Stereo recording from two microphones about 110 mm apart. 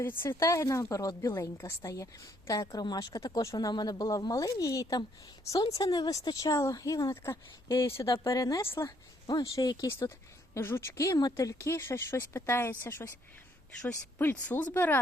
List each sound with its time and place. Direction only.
0.0 s speech: 20° left (ahead or behind)